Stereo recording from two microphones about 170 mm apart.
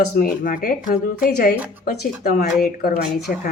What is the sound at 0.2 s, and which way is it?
Speech, 55° left (ahead or behind).